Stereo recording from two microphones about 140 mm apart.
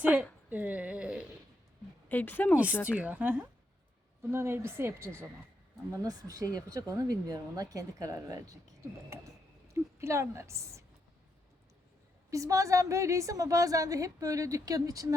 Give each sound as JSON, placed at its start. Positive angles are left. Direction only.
{"t": 0.0, "sound": "a sound", "side_deg": -10}
{"t": 2.0, "sound": "a woman's voice", "side_deg": 15}
{"t": 2.8, "sound": "a woman's voice", "side_deg": -10}
{"t": 9.7, "sound": "a woman's voice", "side_deg": -20}
{"t": 12.3, "sound": "a woman's voice", "side_deg": -25}